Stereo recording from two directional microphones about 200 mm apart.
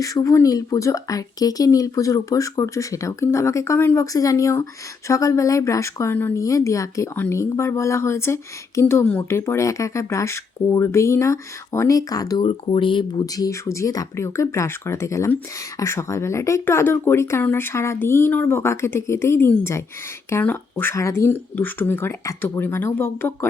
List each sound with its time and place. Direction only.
0.0 s speech: 15° left (ahead or behind)